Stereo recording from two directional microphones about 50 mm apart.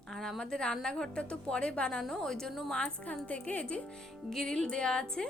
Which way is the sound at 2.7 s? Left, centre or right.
Left.